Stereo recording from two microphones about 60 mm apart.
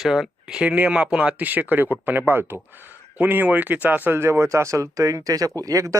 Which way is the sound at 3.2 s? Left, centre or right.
Right.